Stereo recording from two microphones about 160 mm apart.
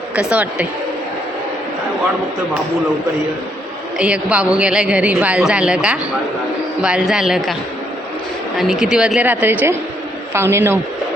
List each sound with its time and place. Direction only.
0.2 s a woman's voice: 10° right (ahead or behind)
3.9 s a woman's voice: 5° right (ahead or behind)
8.5 s a man's voice: 5° right (ahead or behind)